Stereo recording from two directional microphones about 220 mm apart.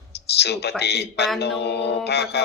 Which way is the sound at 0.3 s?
50° left (ahead or behind).